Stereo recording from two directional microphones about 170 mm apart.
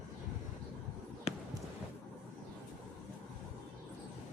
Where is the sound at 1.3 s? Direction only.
40° left (ahead or behind).